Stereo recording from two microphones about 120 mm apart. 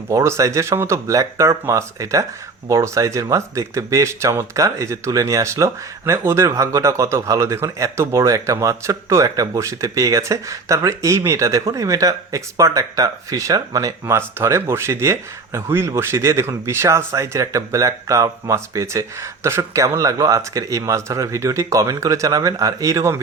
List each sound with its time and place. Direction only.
0.1 s speech: 25° right (ahead or behind)